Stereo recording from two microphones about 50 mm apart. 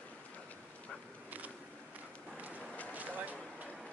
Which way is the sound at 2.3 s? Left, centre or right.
Right.